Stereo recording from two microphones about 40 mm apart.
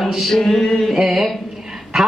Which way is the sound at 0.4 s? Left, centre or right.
Centre.